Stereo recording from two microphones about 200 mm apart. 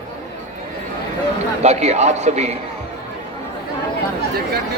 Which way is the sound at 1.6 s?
35° right (ahead or behind).